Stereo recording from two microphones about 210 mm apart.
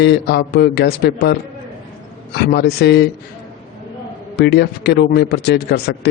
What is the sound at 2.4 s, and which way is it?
Speech, 50° left (ahead or behind).